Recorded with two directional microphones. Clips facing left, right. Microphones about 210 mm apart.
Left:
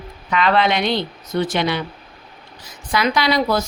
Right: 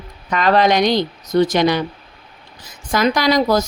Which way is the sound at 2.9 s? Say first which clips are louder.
Right 3 dB; 45° right (ahead or behind).